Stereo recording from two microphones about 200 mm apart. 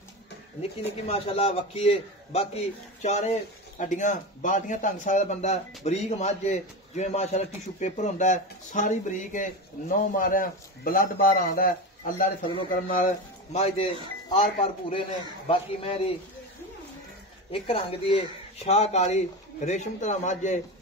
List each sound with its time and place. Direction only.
0.6 s a man's voice: 30° left (ahead or behind)
12.4 s a man's voice: 25° left (ahead or behind)
17.5 s a man's voice: 25° left (ahead or behind)